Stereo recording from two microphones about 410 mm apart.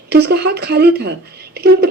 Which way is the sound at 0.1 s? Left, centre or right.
Right.